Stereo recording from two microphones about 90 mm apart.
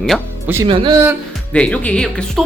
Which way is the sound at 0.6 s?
65° right (ahead or behind).